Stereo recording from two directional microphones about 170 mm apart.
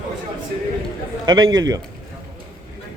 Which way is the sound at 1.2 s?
25° right (ahead or behind).